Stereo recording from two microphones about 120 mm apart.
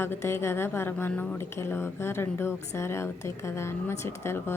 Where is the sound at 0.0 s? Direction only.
20° left (ahead or behind).